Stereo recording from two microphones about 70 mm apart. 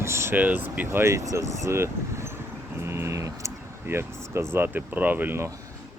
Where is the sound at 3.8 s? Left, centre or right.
Right.